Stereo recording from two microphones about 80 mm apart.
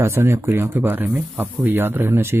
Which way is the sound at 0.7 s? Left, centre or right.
Right.